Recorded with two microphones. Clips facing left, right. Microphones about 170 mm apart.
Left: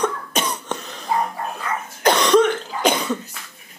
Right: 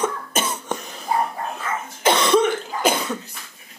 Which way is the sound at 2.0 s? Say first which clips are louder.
Left 2 dB; centre (ahead or behind).